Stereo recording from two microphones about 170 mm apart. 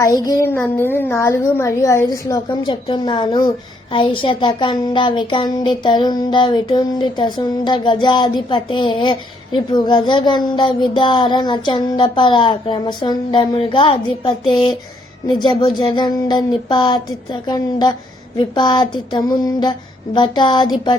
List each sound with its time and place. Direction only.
0.0 s a woman's voice: 20° left (ahead or behind)